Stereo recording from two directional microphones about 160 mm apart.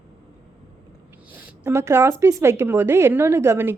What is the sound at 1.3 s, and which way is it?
A woman's voice, 15° right (ahead or behind).